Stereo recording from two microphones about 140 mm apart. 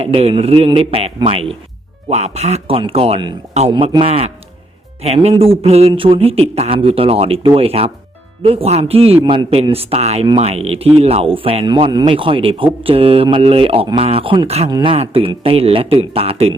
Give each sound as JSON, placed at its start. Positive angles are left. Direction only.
{"t": 0.0, "sound": "speech", "side_deg": -45}
{"t": 11.7, "sound": "speech", "side_deg": -30}